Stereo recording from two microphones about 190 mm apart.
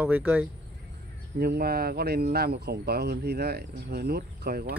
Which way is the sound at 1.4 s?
55° right (ahead or behind).